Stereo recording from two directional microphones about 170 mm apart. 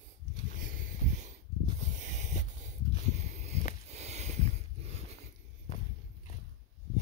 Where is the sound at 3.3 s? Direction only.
40° right (ahead or behind).